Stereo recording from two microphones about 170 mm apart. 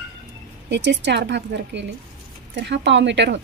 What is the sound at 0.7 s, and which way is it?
Speech, 90° right.